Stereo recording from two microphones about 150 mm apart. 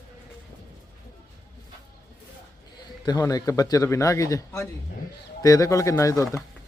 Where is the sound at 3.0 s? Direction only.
25° left (ahead or behind).